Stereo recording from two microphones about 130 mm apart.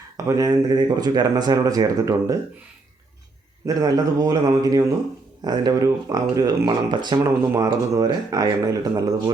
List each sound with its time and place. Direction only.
0.3 s speech: 25° right (ahead or behind)
3.7 s speech: 30° right (ahead or behind)